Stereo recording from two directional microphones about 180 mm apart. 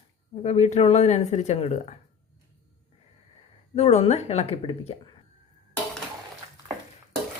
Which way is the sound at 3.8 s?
35° left (ahead or behind).